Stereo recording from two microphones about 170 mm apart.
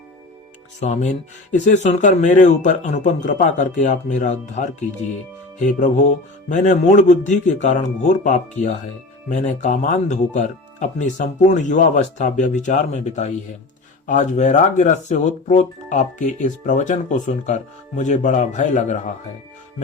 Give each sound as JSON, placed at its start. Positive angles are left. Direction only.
{"t": 0.8, "sound": "speech", "side_deg": 45}